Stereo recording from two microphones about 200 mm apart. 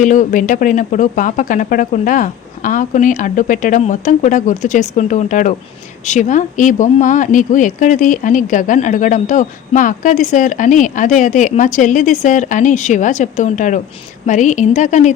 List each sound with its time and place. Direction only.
0.0 s speech: 40° left (ahead or behind)